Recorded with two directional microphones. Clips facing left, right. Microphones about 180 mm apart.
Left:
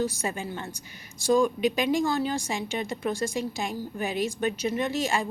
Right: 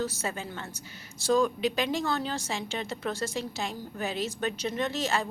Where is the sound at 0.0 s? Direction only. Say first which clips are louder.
Left 3 dB; 15° left (ahead or behind).